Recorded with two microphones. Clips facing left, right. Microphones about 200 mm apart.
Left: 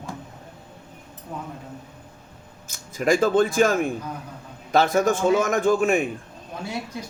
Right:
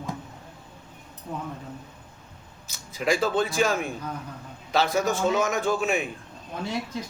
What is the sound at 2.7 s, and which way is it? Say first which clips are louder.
A man's voice: left 4 dB; 45° left (ahead or behind).